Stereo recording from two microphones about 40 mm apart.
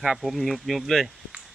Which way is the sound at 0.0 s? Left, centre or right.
Centre.